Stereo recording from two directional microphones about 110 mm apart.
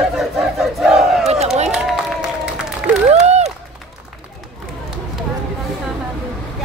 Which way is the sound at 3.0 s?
90° right.